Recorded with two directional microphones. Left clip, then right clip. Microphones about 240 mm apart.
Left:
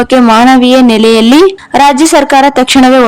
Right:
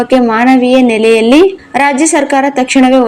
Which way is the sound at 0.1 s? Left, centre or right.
Left.